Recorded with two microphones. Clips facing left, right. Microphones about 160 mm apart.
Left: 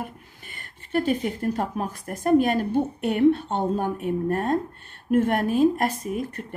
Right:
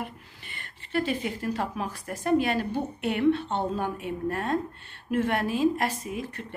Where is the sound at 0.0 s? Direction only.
45° left (ahead or behind).